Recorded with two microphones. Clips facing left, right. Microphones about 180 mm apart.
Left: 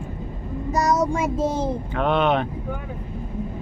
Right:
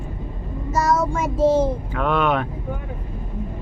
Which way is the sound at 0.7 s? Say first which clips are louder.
Even; 20° left (ahead or behind).